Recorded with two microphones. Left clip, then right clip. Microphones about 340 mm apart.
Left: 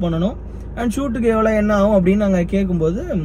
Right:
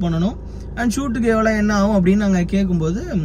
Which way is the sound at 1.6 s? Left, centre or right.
Right.